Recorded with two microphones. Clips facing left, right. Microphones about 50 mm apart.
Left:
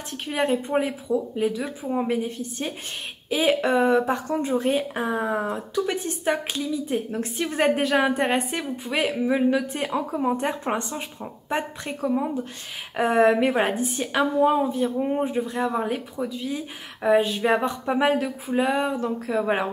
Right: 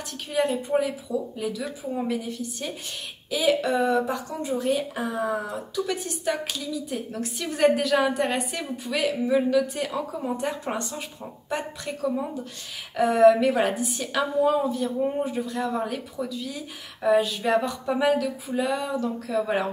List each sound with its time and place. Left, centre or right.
0.3 s a woman's voice: left